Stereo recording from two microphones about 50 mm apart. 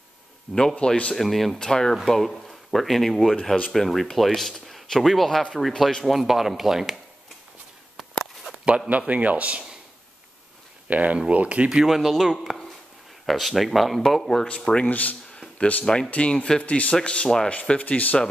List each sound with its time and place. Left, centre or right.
0.7 s speech: left
1.1 s speech: centre
8.8 s speech: right
10.9 s speech: right
11.7 s speech: centre
12.1 s speech: centre
14.4 s speech: centre
14.9 s speech: left
15.5 s a sound: left
15.8 s speech: centre
16.1 s speech: left